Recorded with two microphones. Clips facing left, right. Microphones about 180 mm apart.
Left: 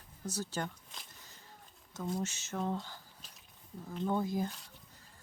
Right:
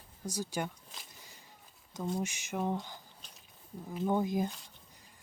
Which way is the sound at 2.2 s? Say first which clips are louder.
Right 2 dB; 15° right (ahead or behind).